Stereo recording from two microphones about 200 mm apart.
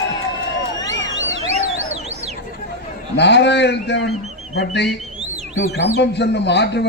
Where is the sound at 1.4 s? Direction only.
35° right (ahead or behind).